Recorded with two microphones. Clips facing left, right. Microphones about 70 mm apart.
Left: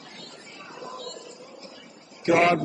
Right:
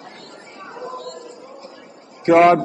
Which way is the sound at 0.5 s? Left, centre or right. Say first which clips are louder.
Right 7 dB; right.